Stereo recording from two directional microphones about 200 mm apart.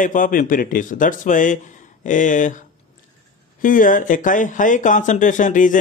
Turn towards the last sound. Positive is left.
turn(degrees=40)  # may be behind; listen again after turning